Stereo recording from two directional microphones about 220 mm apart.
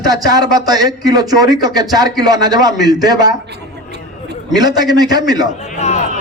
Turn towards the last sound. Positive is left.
turn(degrees=30)  # may be behind; listen again after turning